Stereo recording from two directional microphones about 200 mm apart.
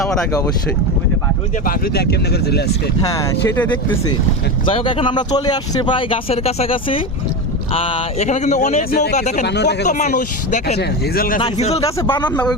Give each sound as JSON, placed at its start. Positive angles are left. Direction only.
{"t": 0.0, "sound": "speech", "side_deg": 5}
{"t": 1.6, "sound": "speech", "side_deg": 50}
{"t": 3.0, "sound": "speech", "side_deg": 15}
{"t": 4.7, "sound": "speech", "side_deg": 25}
{"t": 9.5, "sound": "speech", "side_deg": 60}
{"t": 9.8, "sound": "speech", "side_deg": 40}
{"t": 10.8, "sound": "speech", "side_deg": 50}
{"t": 11.3, "sound": "speech", "side_deg": 30}
{"t": 11.9, "sound": "speech", "side_deg": 15}